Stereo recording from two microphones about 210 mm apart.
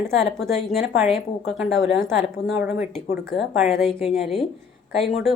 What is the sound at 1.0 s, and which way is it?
Speech, centre (ahead or behind).